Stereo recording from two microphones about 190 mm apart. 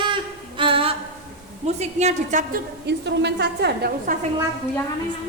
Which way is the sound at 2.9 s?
65° right (ahead or behind).